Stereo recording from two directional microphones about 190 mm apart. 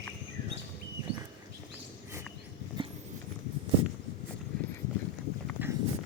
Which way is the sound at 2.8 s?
25° right (ahead or behind).